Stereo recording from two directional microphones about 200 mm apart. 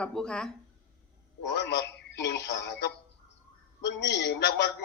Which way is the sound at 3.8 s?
60° left (ahead or behind).